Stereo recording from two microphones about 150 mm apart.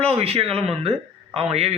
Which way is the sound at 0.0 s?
40° right (ahead or behind).